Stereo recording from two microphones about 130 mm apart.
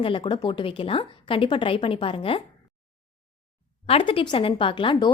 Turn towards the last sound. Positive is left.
turn(degrees=35)  # may be behind; listen again after turning